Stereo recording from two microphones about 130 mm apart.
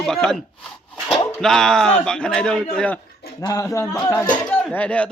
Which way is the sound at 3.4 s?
25° left (ahead or behind).